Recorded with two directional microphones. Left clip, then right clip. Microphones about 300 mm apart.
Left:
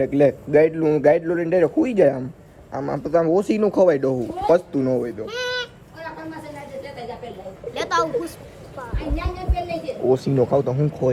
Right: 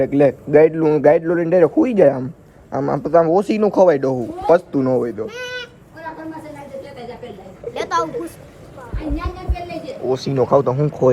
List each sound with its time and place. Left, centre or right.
0.0 s speech: centre
2.7 s speech: centre
3.2 s speech: centre
5.3 s a sound: left
7.7 s a sound: centre
10.2 s speech: centre